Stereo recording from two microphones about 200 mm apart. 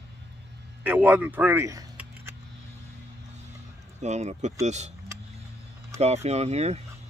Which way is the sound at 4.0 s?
35° right (ahead or behind).